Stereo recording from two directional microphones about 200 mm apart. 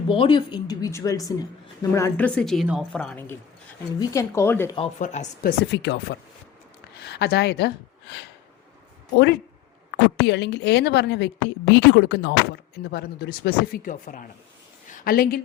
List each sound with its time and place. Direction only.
0.1 s a woman's voice: 25° left (ahead or behind)
4.9 s speech: 35° left (ahead or behind)
5.5 s a woman's voice: 60° left (ahead or behind)
9.1 s a woman's voice: 60° left (ahead or behind)